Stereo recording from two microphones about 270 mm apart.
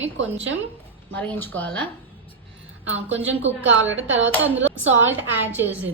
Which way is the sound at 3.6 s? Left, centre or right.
Right.